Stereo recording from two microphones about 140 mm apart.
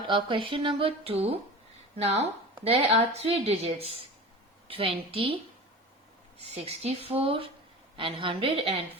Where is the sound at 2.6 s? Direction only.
40° right (ahead or behind).